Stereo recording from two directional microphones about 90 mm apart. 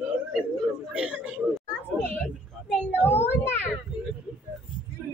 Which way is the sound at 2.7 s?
20° left (ahead or behind).